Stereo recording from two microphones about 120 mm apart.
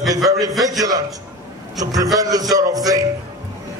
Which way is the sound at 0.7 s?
30° right (ahead or behind).